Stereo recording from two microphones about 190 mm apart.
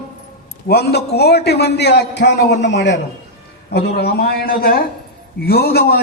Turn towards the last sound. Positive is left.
turn(degrees=55)  # may be behind; listen again after turning